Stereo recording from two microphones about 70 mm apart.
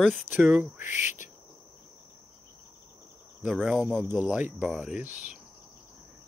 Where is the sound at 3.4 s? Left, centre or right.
Centre.